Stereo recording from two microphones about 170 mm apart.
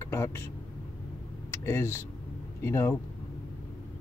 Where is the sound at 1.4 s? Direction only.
15° left (ahead or behind).